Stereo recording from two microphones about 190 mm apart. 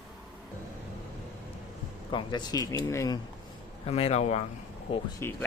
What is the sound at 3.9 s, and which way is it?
Speech, 30° left (ahead or behind).